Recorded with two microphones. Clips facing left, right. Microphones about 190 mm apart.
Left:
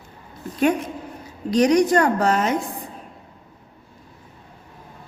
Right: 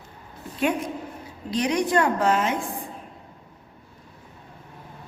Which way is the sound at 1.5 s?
45° left (ahead or behind).